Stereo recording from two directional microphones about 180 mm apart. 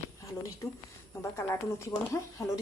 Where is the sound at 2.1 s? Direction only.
15° left (ahead or behind).